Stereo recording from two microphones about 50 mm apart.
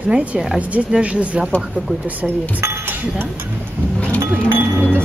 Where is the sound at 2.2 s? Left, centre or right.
Right.